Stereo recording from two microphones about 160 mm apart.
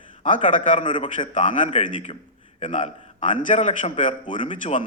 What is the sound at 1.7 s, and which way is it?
Speech, 35° left (ahead or behind).